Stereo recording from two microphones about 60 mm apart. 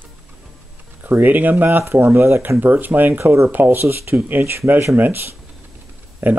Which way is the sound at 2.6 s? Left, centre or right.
Right.